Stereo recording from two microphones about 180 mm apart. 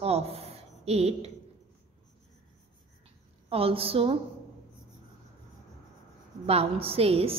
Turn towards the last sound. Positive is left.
turn(degrees=-35)  # may be behind; listen again after turning